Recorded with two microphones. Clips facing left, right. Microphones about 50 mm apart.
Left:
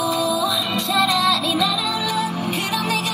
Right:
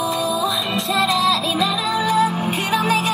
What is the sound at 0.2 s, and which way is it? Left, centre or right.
Music, centre.